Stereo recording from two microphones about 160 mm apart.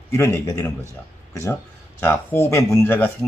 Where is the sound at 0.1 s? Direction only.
20° left (ahead or behind).